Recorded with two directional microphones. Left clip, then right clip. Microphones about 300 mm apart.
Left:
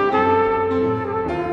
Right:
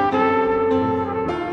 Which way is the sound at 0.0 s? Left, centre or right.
Left.